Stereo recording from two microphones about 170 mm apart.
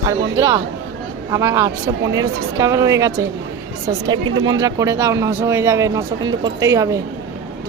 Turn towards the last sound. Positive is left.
turn(degrees=-20)  # may be behind; listen again after turning